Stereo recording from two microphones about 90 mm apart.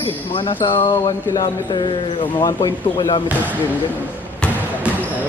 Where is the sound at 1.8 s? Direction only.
65° left (ahead or behind).